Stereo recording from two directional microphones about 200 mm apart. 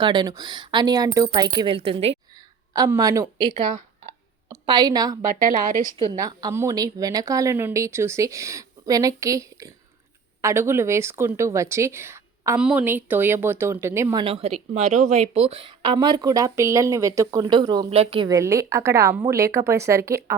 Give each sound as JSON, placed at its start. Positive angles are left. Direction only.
{"t": 0.0, "sound": "speech", "side_deg": -20}
{"t": 2.7, "sound": "a woman's voice", "side_deg": -20}
{"t": 5.3, "sound": "a woman's voice", "side_deg": -45}
{"t": 6.0, "sound": "speech", "side_deg": -20}